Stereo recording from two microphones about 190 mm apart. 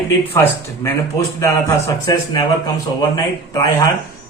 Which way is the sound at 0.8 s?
15° left (ahead or behind).